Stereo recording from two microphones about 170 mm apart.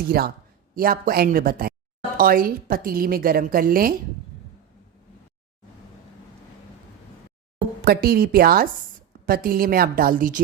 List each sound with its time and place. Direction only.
0.0 s a woman's voice: 65° right (ahead or behind)
7.9 s a woman's voice: 60° right (ahead or behind)